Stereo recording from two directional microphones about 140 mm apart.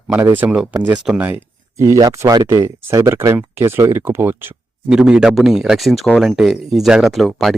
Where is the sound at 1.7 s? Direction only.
20° right (ahead or behind); by 7.5 s centre (ahead or behind).